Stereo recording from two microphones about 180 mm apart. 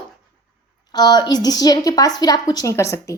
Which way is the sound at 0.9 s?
20° left (ahead or behind).